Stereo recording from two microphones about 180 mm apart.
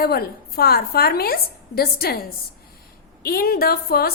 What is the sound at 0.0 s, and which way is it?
A woman's voice, 60° left (ahead or behind).